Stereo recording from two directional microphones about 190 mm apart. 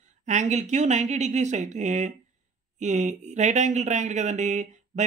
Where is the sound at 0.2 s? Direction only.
40° right (ahead or behind).